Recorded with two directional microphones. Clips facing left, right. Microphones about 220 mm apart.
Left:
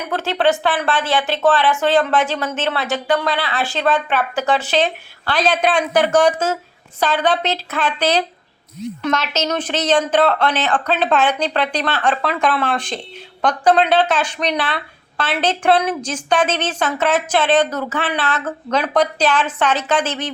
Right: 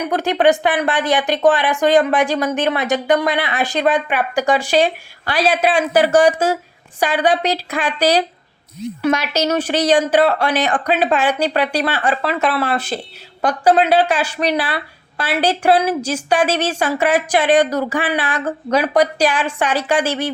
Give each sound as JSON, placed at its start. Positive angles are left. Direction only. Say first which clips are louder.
{"t": 0.1, "sound": "speech", "louder": "right 2 dB", "side_deg": -15}